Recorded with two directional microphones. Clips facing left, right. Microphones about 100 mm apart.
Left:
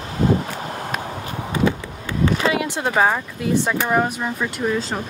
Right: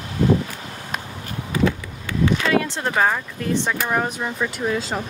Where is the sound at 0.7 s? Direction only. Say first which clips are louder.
Left 2 dB; 50° left (ahead or behind).